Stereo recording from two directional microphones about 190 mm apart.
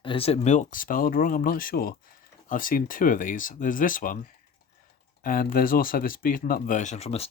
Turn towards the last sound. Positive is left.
turn(degrees=35)  # may be behind; listen again after turning